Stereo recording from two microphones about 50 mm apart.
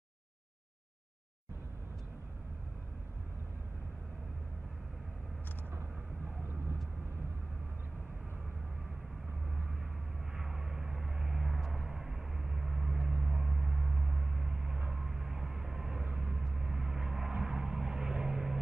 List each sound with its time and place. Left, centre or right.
10.3 s vehicle: centre